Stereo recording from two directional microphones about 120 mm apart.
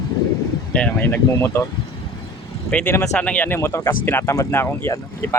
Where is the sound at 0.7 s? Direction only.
10° left (ahead or behind).